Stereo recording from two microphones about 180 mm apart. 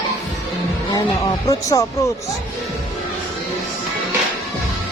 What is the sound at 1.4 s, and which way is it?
Speech, 20° left (ahead or behind).